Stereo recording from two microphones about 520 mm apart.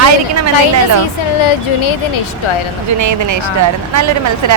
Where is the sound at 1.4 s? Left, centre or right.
Left.